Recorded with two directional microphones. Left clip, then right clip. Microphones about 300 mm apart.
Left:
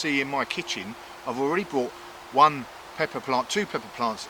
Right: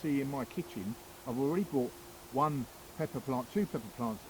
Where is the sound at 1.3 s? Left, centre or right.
Centre.